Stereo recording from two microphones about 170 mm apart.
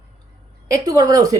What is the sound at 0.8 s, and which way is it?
Speech, 20° right (ahead or behind).